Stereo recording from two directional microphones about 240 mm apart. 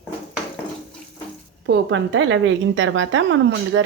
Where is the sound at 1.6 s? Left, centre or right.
Right.